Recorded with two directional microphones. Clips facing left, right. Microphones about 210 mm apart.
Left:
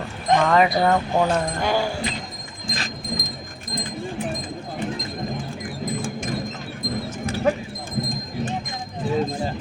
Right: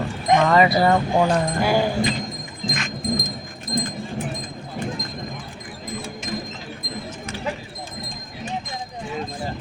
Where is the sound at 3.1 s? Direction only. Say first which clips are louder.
Right 6 dB; 45° right (ahead or behind).